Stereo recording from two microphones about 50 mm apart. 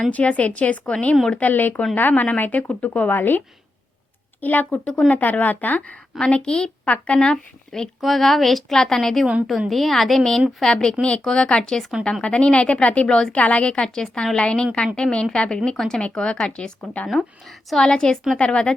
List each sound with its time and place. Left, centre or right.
0.1 s a woman's voice: left
3.1 s a woman's voice: left
6.1 s a woman's voice: centre
8.0 s a woman's voice: centre
11.0 s a woman's voice: left
13.1 s speech: centre
13.3 s a woman's voice: left
17.1 s a woman's voice: centre; by 18.7 s left